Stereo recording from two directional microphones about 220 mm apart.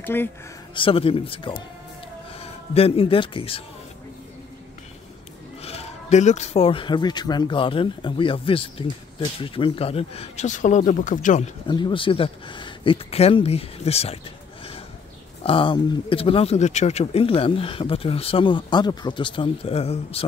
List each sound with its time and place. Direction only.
0.0 s speech: 10° left (ahead or behind)
0.7 s speech: 25° left (ahead or behind)
5.6 s speech: 30° left (ahead or behind)
11.6 s speech: 20° left (ahead or behind)
15.4 s speech: 25° left (ahead or behind)